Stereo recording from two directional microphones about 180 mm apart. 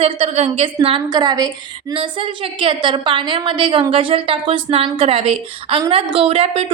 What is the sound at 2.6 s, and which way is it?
A woman's voice, 25° right (ahead or behind).